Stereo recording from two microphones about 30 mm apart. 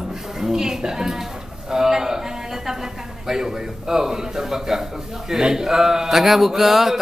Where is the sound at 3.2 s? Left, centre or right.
Centre.